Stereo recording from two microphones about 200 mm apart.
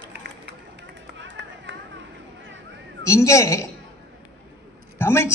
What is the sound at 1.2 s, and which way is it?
Run, 65° right (ahead or behind).